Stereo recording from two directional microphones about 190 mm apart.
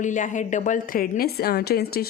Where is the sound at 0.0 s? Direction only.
40° left (ahead or behind).